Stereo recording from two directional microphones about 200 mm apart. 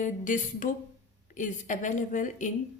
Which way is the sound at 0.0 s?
40° left (ahead or behind).